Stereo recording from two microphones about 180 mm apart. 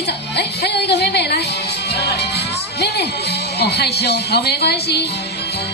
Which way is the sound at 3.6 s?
65° left (ahead or behind).